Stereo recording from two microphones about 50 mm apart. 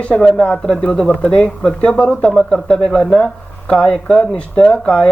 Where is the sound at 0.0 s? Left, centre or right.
Centre.